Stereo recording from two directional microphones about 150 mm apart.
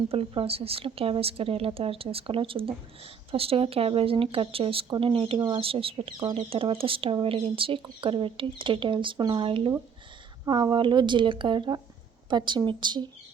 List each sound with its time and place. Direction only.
0.1 s a woman's voice: 40° right (ahead or behind)